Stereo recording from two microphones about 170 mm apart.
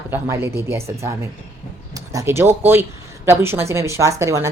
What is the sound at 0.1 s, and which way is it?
A woman's voice, 15° right (ahead or behind).